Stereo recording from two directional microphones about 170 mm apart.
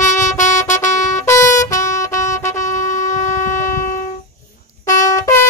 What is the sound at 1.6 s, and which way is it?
Brass instrument, 20° left (ahead or behind).